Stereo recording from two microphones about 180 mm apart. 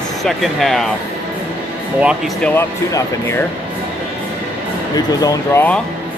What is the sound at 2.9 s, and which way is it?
Speech, 15° left (ahead or behind).